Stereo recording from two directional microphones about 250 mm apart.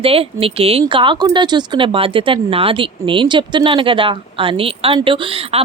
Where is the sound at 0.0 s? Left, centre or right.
Right.